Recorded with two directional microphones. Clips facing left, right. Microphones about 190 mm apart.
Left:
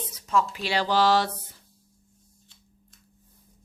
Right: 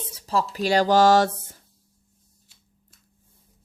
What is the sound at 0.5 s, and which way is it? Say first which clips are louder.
A woman's voice: right 6 dB; 45° right (ahead or behind).